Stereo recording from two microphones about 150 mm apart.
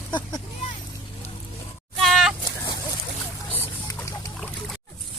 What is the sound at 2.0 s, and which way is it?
Goat, centre (ahead or behind).